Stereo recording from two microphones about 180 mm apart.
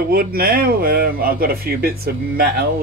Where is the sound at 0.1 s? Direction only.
55° right (ahead or behind).